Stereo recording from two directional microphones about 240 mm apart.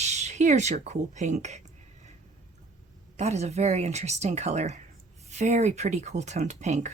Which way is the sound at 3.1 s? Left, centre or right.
Right.